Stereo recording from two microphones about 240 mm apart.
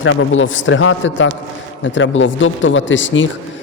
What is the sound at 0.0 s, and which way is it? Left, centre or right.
Speech, left.